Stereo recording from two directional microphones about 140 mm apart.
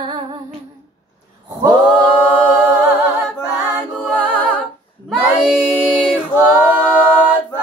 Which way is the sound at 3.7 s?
5° right (ahead or behind).